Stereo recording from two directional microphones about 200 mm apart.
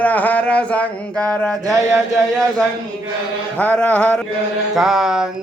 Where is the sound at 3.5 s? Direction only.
5° left (ahead or behind).